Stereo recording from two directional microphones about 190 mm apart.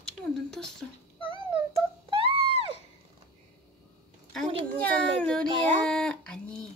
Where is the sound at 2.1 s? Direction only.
30° right (ahead or behind).